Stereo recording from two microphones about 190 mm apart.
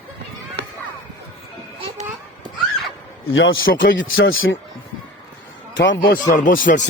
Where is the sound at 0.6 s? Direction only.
60° right (ahead or behind).